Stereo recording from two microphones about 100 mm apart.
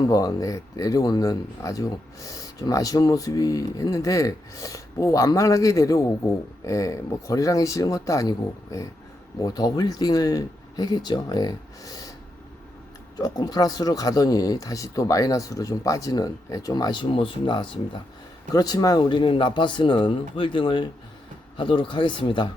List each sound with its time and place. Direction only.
0.1 s speech: 40° left (ahead or behind)
13.1 s speech: 40° left (ahead or behind)
18.5 s speech: 40° left (ahead or behind); by 22.4 s 55° left (ahead or behind)